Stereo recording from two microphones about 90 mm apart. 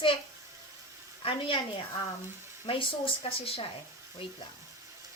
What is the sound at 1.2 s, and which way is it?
Speech, 75° left (ahead or behind).